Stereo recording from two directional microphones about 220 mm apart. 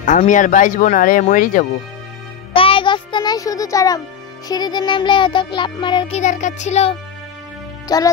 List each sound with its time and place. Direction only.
0.0 s speech: 35° left (ahead or behind)
2.5 s music: 25° left (ahead or behind)
7.9 s speech: 15° left (ahead or behind)